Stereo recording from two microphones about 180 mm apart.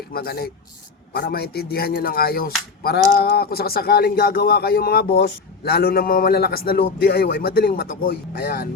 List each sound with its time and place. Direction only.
0.1 s speech: 60° left (ahead or behind)